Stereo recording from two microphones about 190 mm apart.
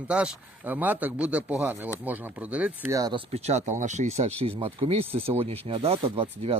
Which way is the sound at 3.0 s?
25° right (ahead or behind).